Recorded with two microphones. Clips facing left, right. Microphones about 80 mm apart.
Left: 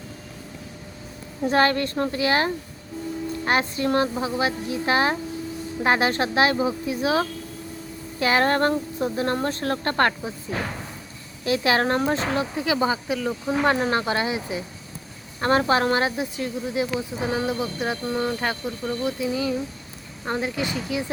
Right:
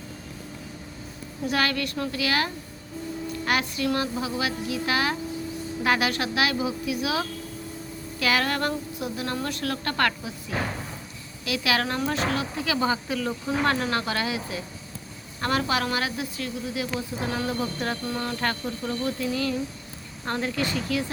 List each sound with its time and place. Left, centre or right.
1.5 s a woman's voice: left
11.4 s speech: left; by 17.9 s centre
18.0 s a sound: centre
20.2 s speech: centre